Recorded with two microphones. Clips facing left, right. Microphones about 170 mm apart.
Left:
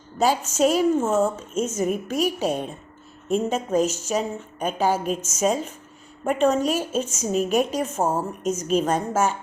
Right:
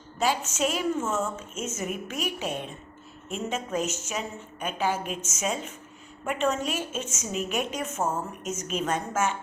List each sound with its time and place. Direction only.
0.2 s a woman's voice: 40° left (ahead or behind)